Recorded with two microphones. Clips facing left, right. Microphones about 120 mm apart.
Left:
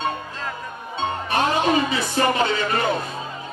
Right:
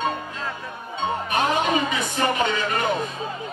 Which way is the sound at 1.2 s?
35° left (ahead or behind).